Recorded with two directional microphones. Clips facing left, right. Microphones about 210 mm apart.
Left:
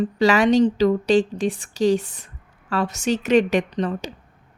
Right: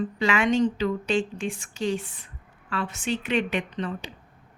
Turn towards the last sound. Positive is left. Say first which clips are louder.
# left 7 dB
turn(degrees=40)  # may be behind; listen again after turning